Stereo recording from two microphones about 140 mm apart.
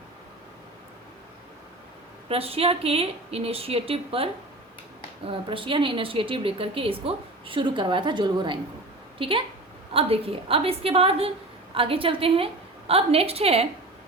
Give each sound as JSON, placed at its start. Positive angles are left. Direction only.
{"t": 2.3, "sound": "a woman's voice", "side_deg": -45}